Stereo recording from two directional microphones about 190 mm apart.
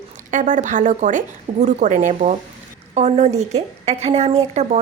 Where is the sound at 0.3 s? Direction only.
40° right (ahead or behind).